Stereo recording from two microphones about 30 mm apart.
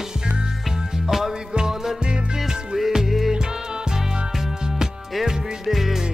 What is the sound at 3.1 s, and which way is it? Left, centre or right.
Music, centre.